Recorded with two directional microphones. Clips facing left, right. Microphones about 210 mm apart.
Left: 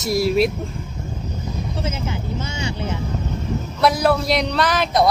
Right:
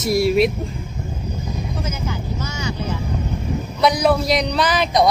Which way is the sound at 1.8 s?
25° left (ahead or behind).